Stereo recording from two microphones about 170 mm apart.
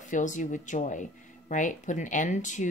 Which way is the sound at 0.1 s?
50° left (ahead or behind).